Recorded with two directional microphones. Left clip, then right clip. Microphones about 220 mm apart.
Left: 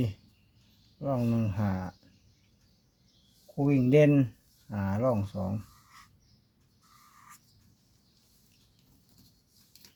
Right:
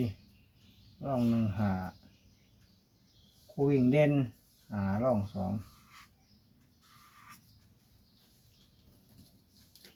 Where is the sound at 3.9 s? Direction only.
50° left (ahead or behind).